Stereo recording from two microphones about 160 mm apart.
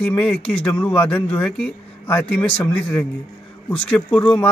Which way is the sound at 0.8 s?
15° left (ahead or behind).